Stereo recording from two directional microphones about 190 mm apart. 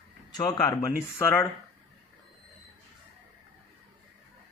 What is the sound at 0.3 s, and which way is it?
Speech, 20° left (ahead or behind).